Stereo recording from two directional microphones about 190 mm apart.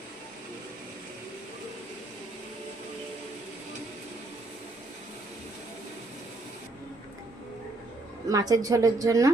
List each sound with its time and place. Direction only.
8.3 s a woman's voice: 20° right (ahead or behind)